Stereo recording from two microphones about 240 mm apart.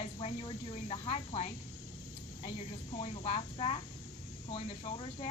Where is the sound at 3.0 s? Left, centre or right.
Left.